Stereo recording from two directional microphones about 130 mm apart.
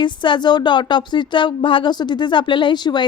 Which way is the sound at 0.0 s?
35° left (ahead or behind).